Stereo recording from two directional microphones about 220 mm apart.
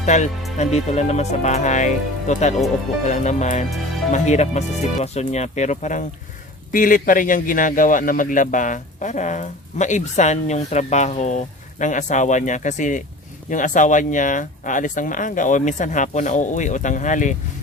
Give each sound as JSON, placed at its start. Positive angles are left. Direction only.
{"t": 0.0, "sound": "a man's voice", "side_deg": 35}